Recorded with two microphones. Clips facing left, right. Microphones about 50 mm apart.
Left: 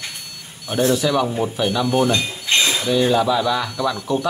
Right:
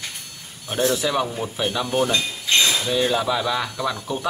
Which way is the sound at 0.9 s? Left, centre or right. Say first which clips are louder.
Left 4 dB; centre.